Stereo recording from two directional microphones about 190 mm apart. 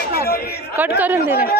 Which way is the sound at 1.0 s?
10° right (ahead or behind).